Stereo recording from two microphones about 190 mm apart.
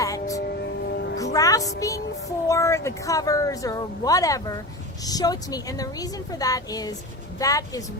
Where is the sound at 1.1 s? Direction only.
20° left (ahead or behind).